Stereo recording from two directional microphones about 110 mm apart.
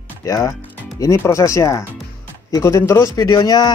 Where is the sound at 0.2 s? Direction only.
30° left (ahead or behind).